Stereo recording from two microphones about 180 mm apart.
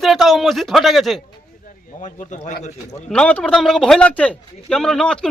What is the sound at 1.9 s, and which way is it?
Speech, 45° left (ahead or behind).